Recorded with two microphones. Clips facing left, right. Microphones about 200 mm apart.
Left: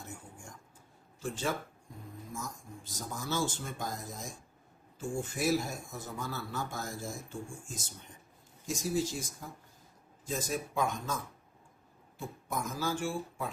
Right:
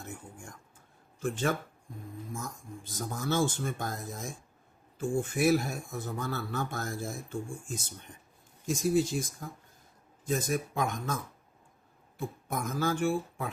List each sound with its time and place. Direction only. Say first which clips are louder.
1.2 s speech: right 4 dB; 55° right (ahead or behind)
8.6 s speech: right 5 dB; 55° right (ahead or behind)
10.2 s speech: right 5 dB; 60° right (ahead or behind)